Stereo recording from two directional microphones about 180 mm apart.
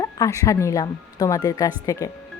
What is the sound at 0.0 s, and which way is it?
Speech, 20° left (ahead or behind).